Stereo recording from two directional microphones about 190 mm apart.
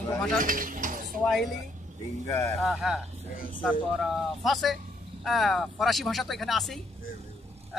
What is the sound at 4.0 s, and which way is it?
A man's voice, centre (ahead or behind).